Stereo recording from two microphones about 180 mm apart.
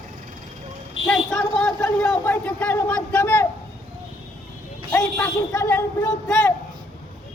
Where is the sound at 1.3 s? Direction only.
5° left (ahead or behind).